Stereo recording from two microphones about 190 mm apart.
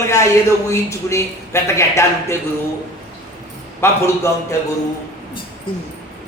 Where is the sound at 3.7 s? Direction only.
15° left (ahead or behind).